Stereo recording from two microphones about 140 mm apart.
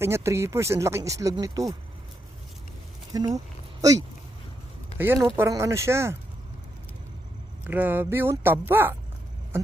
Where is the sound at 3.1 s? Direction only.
25° right (ahead or behind).